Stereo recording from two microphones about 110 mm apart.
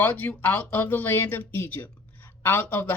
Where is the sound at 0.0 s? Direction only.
15° left (ahead or behind).